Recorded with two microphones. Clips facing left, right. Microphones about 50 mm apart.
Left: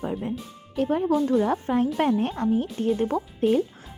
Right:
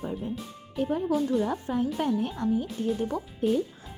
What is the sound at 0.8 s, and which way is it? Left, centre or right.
Speech, left.